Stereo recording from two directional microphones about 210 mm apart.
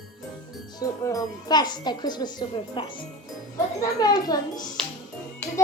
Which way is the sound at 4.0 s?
20° left (ahead or behind).